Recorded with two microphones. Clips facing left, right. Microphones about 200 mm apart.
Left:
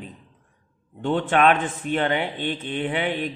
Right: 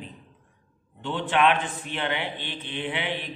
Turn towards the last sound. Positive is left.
turn(degrees=45)  # may be behind; listen again after turning